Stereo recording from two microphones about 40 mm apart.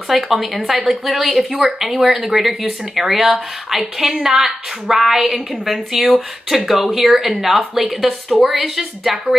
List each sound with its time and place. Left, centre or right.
0.1 s a woman's voice: centre